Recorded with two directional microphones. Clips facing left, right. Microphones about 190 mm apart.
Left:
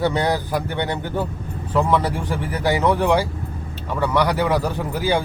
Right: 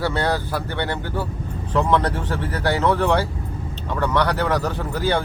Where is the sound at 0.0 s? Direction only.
15° left (ahead or behind).